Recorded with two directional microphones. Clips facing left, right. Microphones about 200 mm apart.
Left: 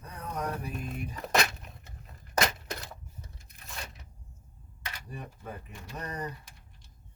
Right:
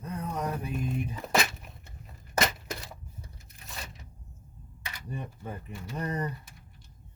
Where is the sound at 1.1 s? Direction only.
Centre (ahead or behind).